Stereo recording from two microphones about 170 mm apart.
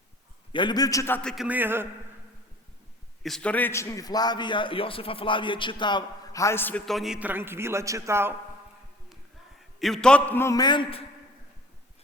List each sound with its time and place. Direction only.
0.5 s a man's voice: 25° left (ahead or behind); by 1.5 s 5° left (ahead or behind)
1.5 s a man's voice: 10° right (ahead or behind)
3.2 s a man's voice: 5° left (ahead or behind); by 8.3 s 15° right (ahead or behind)
9.8 s a man's voice: 5° left (ahead or behind); by 11.0 s 25° left (ahead or behind)